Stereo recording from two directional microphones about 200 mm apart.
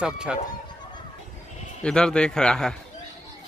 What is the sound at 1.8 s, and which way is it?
Speech, 5° left (ahead or behind).